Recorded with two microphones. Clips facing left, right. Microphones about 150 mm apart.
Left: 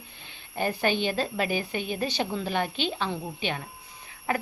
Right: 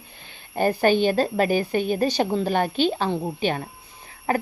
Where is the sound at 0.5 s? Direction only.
45° right (ahead or behind).